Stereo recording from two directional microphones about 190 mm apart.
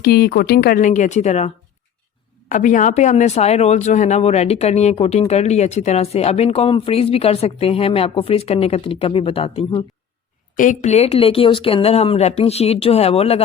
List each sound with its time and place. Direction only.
0.0 s a woman's voice: 55° left (ahead or behind); by 1.5 s 35° left (ahead or behind)
2.5 s speech: 40° left (ahead or behind)
10.5 s speech: 45° left (ahead or behind)